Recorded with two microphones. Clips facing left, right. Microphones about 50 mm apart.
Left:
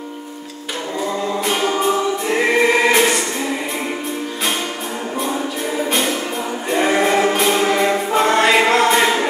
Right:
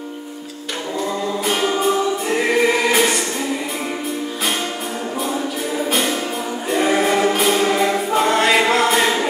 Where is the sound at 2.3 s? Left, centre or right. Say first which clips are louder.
Left 2 dB; centre.